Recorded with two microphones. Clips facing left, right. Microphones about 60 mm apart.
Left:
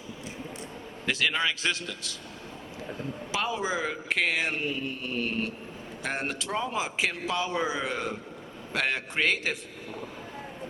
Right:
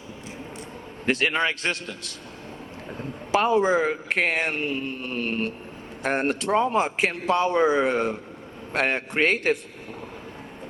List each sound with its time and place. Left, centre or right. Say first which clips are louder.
1.0 s a man's voice: right 4 dB; right
3.0 s a man's voice: right 9 dB; right